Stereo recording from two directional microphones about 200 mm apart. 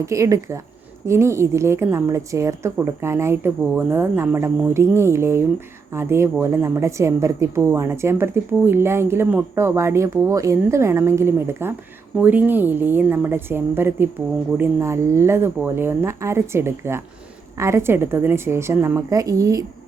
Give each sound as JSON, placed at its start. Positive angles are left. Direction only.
{"t": 0.0, "sound": "a woman's voice", "side_deg": -15}